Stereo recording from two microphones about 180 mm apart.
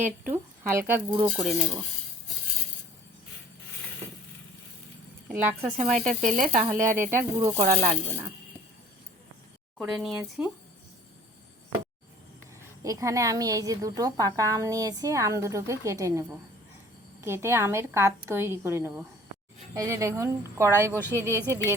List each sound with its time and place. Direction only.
0.0 s speech: 10° right (ahead or behind)
1.1 s speech: 30° right (ahead or behind)
5.3 s a woman's voice: 10° right (ahead or behind)
5.7 s speech: 40° right (ahead or behind)
9.7 s speech: 5° right (ahead or behind)
12.8 s a woman's voice: 20° right (ahead or behind)